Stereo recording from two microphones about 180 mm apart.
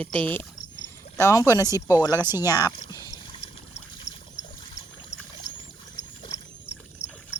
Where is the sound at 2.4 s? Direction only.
20° left (ahead or behind).